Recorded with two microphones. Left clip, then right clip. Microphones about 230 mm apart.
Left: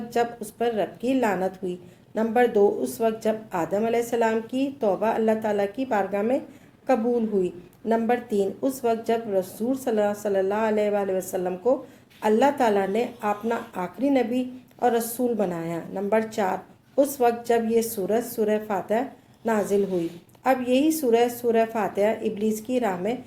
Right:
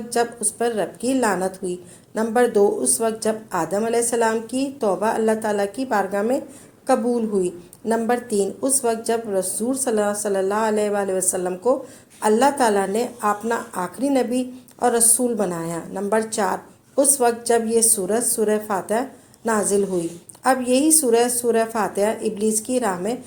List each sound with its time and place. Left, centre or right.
0.1 s speech: right